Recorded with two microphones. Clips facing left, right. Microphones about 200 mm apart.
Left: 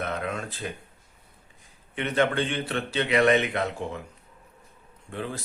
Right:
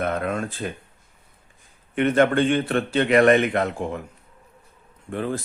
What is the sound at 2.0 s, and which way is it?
Speech, 50° right (ahead or behind).